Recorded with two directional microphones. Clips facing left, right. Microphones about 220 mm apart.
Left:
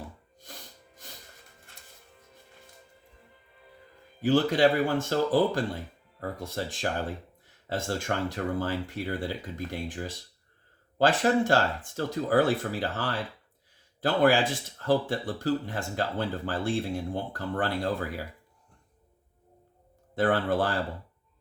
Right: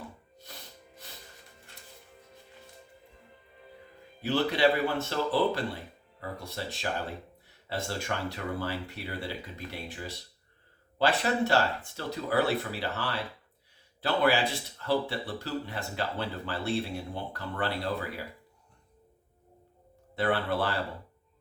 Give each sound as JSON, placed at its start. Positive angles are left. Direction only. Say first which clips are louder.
{"t": 4.2, "sound": "speech", "louder": "left 4 dB", "side_deg": 45}
{"t": 7.9, "sound": "speech", "louder": "left 5 dB", "side_deg": 45}
{"t": 20.1, "sound": "speech", "louder": "left 3 dB", "side_deg": 50}